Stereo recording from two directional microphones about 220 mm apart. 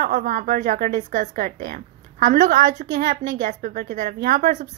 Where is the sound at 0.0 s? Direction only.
40° right (ahead or behind).